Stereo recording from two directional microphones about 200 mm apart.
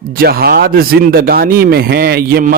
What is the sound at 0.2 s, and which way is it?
A man's voice, 50° right (ahead or behind).